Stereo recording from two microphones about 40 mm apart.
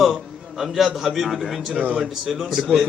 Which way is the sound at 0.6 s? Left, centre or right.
Centre.